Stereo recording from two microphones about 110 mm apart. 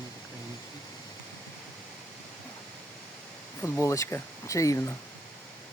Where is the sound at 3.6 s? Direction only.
20° left (ahead or behind).